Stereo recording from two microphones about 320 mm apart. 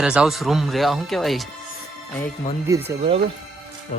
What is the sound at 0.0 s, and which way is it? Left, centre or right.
Speech, centre.